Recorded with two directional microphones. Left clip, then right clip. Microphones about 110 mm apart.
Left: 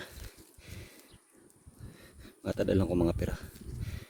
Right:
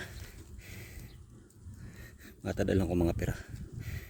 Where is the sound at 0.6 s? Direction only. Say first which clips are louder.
Right 2 dB; 40° left (ahead or behind).